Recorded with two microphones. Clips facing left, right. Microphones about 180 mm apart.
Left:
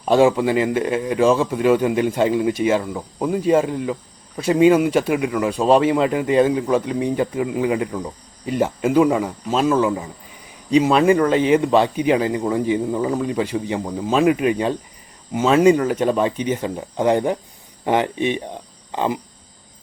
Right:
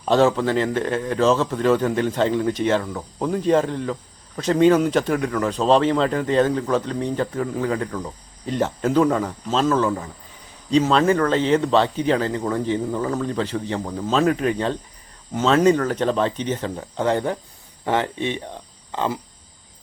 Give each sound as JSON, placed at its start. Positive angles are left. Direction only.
{"t": 0.0, "sound": "speech", "side_deg": 10}